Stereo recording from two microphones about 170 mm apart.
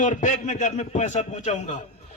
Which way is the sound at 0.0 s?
45° left (ahead or behind).